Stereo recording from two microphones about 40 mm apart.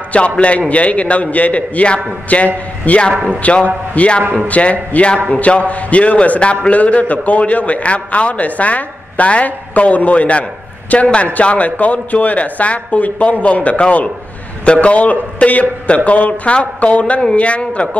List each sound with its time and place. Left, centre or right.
0.1 s a man's voice: left